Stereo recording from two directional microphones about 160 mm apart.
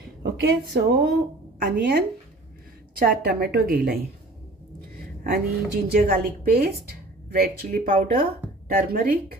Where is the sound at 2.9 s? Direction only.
65° right (ahead or behind).